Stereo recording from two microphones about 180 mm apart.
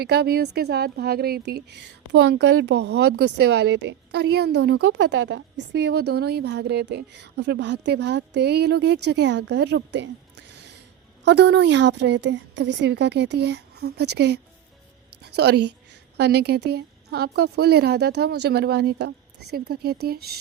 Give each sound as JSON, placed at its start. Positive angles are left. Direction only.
{"t": 0.0, "sound": "a woman's voice", "side_deg": -60}